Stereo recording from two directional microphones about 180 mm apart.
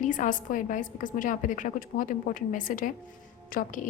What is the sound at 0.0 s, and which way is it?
A woman's voice, 45° left (ahead or behind).